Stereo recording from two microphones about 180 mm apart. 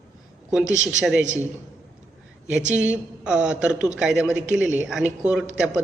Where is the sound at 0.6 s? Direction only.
40° right (ahead or behind).